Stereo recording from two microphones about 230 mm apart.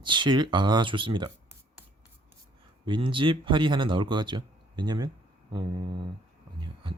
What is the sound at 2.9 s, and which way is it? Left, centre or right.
Speech, right.